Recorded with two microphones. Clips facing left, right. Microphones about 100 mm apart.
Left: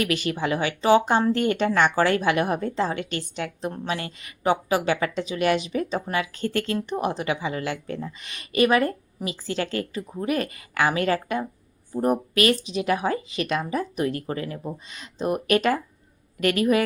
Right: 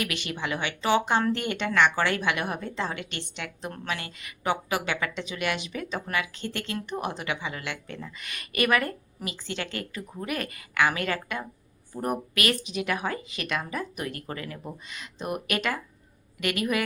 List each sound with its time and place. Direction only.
0.0 s a woman's voice: 40° left (ahead or behind)